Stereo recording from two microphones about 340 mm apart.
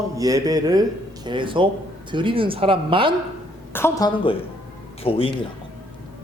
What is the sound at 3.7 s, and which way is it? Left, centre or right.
A man's voice, centre.